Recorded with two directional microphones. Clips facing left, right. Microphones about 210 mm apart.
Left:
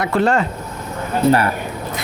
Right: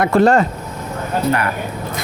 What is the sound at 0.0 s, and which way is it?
Speech, 45° right (ahead or behind).